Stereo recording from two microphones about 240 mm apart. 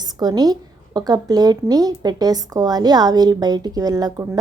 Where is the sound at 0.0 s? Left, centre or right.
Centre.